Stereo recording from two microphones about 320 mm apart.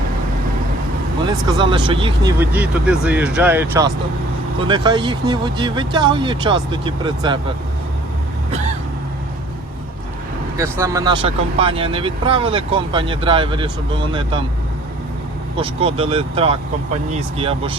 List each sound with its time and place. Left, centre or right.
1.5 s speech: centre
10.6 s speech: centre
15.5 s speech: centre